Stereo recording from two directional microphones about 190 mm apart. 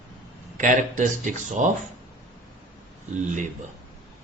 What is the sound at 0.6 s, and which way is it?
A man's voice, 40° right (ahead or behind).